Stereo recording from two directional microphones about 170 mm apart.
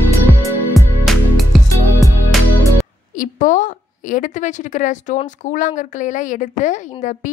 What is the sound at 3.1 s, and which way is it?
A woman's voice, 50° left (ahead or behind).